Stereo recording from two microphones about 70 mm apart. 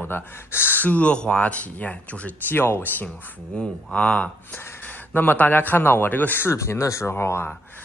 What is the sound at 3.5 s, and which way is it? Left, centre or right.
Speech, centre.